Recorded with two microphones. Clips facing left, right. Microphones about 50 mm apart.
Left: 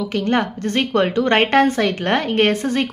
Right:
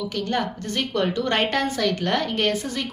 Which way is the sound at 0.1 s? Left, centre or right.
Left.